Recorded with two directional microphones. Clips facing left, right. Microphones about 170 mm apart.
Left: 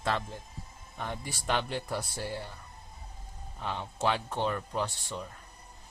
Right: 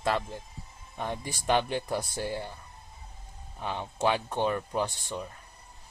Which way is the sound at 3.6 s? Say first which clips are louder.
Right 3 dB; 15° right (ahead or behind).